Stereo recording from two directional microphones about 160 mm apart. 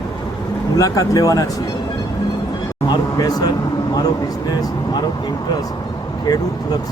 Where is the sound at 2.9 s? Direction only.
25° left (ahead or behind).